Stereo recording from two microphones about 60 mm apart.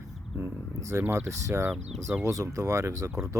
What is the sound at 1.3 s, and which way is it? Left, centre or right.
Speech, right.